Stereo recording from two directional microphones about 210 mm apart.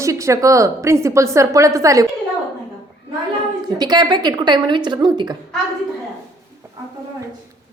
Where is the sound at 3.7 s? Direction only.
20° right (ahead or behind).